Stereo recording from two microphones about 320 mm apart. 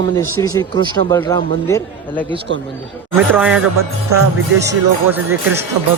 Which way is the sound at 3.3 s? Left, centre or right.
Centre.